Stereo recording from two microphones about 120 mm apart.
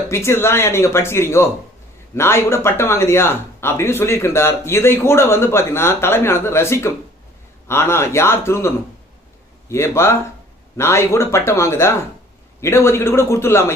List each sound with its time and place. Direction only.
0.1 s speech: 20° left (ahead or behind)